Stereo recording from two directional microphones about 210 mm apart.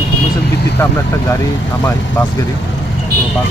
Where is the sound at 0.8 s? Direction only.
15° left (ahead or behind).